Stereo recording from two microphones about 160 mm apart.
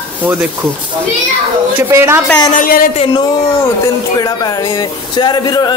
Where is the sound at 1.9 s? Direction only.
15° right (ahead or behind).